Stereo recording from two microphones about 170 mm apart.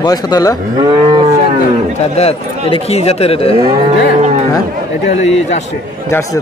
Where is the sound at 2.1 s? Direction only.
35° left (ahead or behind).